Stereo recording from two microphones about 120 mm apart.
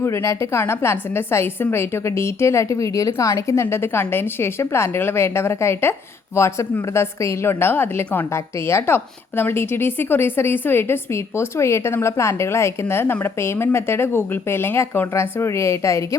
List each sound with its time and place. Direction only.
0.0 s a woman's voice: 20° left (ahead or behind)